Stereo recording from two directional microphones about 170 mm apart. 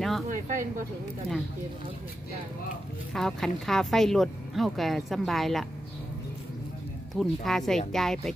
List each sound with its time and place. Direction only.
0.3 s speech: 50° right (ahead or behind)
3.1 s speech: centre (ahead or behind)
7.2 s speech: centre (ahead or behind)